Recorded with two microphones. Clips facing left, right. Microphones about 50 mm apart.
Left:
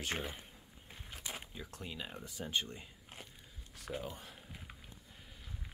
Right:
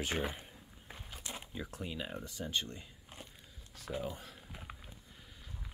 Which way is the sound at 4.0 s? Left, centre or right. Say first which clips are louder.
Right 4 dB; centre.